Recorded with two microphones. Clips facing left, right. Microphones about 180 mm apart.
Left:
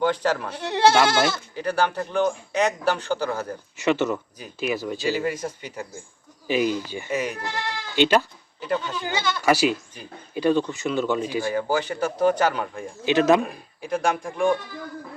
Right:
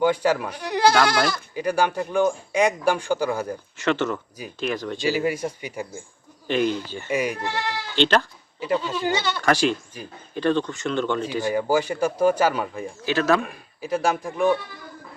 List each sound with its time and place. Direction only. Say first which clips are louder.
0.0 s a man's voice: right 2 dB; 10° right (ahead or behind)
0.5 s speech: left 4 dB; 25° left (ahead or behind)
1.5 s a man's voice: right 3 dB; 10° right (ahead or behind)
3.8 s speech: left 2 dB; 10° left (ahead or behind)
5.0 s a man's voice: right 3 dB; 10° right (ahead or behind)
6.5 s speech: even; 10° left (ahead or behind)
7.1 s a man's voice: right 3 dB; 10° right (ahead or behind)
7.9 s speech: left 1 dB; 10° left (ahead or behind)
8.6 s a man's voice: right 2 dB; 10° right (ahead or behind)
9.4 s speech: left 2 dB; 5° left (ahead or behind)
11.4 s a man's voice: right 6 dB; 10° right (ahead or behind)
13.1 s speech: left 3 dB; 20° left (ahead or behind)
13.8 s speech: right 1 dB; 5° right (ahead or behind)